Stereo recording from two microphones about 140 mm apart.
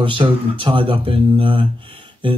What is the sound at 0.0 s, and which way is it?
Speech, 35° right (ahead or behind).